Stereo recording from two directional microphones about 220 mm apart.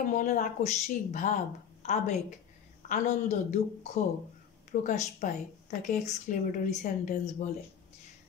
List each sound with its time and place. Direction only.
0.0 s a woman's voice: 35° left (ahead or behind)